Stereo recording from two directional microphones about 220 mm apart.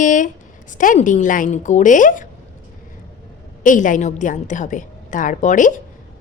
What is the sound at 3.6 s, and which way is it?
A woman's voice, 35° left (ahead or behind).